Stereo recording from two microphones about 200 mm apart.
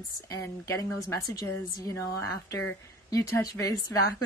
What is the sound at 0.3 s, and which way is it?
A woman's voice, 15° left (ahead or behind).